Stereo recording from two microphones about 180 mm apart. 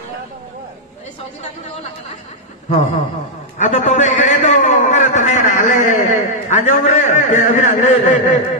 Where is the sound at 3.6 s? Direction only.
40° left (ahead or behind).